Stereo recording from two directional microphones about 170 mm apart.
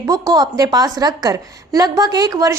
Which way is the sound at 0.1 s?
20° right (ahead or behind).